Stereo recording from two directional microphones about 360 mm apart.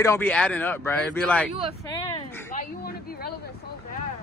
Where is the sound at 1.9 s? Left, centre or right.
Centre.